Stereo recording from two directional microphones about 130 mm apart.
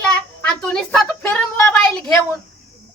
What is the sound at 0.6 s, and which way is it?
Speech, 5° left (ahead or behind).